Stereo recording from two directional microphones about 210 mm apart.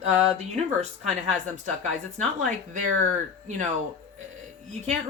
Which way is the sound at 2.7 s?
35° right (ahead or behind).